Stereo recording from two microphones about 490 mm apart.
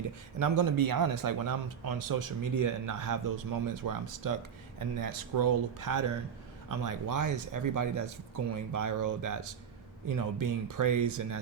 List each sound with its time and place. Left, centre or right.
0.3 s speech: right